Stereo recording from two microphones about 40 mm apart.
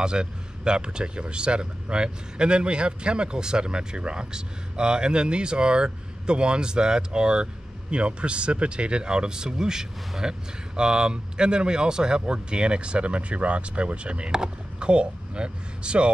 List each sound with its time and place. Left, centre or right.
0.0 s speech: right